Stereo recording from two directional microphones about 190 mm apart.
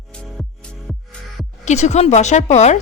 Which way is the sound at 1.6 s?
35° left (ahead or behind).